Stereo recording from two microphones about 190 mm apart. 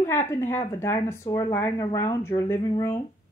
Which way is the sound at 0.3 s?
15° left (ahead or behind).